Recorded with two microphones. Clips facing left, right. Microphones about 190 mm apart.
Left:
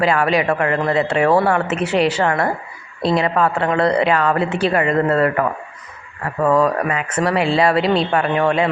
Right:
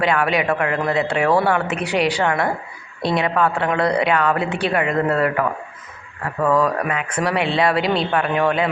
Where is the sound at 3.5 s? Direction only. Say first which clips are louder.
Left 2 dB; centre (ahead or behind).